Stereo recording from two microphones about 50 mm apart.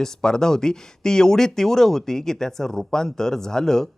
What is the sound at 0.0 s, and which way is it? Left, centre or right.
Speech, centre.